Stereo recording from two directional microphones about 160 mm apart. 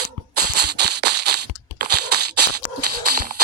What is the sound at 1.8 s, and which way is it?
Crunch, 80° right.